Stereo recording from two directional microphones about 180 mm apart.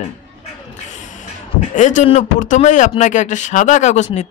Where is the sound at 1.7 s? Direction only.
45° left (ahead or behind).